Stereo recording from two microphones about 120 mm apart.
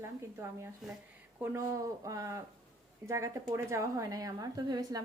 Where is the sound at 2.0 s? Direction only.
25° right (ahead or behind).